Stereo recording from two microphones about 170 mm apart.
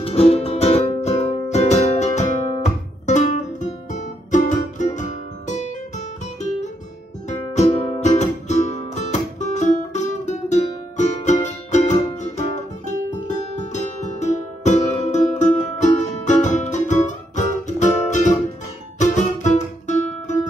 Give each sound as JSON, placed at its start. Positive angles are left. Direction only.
{"t": 0.0, "sound": "music", "side_deg": 35}
{"t": 5.5, "sound": "guitar", "side_deg": 45}
{"t": 7.2, "sound": "music", "side_deg": 40}
{"t": 13.6, "sound": "music", "side_deg": 45}